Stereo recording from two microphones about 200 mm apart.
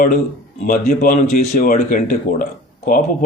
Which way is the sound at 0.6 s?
45° left (ahead or behind).